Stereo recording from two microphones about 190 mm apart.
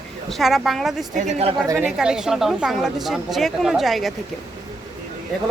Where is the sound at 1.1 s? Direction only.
40° right (ahead or behind).